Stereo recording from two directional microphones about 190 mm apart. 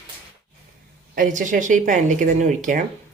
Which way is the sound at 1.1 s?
45° right (ahead or behind).